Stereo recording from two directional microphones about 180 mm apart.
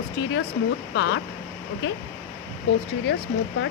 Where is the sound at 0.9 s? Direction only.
90° left.